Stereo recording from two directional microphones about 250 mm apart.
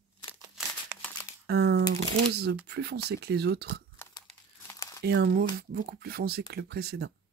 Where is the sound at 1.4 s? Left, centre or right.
Right.